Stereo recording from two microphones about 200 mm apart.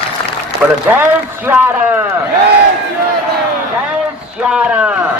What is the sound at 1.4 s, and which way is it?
Speech, 10° right (ahead or behind).